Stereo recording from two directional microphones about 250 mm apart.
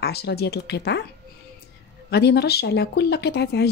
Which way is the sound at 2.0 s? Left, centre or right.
Left.